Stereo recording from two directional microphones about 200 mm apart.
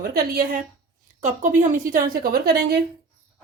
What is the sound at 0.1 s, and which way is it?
A woman's voice, 50° right (ahead or behind).